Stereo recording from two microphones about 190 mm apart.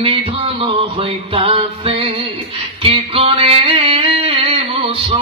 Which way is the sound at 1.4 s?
30° right (ahead or behind).